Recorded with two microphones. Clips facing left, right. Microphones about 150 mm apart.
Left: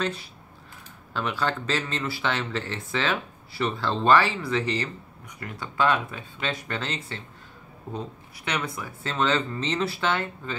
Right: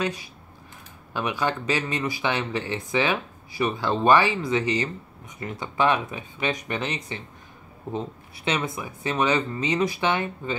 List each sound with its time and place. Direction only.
0.0 s speech: 15° right (ahead or behind)
8.5 s speech: 25° right (ahead or behind)